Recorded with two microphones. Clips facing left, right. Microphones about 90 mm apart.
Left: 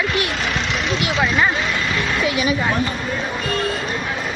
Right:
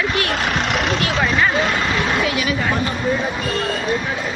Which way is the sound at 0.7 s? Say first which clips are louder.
Right 2 dB; 55° right (ahead or behind).